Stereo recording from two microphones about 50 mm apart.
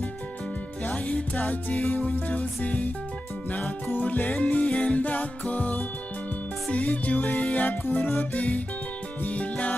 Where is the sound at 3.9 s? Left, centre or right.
Left.